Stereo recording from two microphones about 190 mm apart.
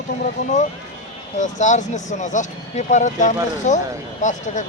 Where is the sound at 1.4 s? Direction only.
40° left (ahead or behind).